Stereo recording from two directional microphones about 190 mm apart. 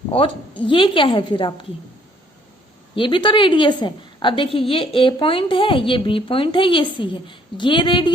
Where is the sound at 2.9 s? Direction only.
25° left (ahead or behind).